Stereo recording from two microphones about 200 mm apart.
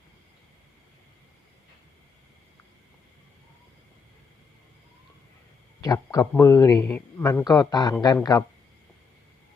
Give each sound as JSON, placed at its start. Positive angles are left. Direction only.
{"t": 5.8, "sound": "a man's voice", "side_deg": 15}